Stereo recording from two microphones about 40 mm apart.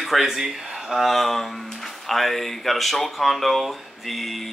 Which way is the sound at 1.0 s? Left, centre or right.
Centre.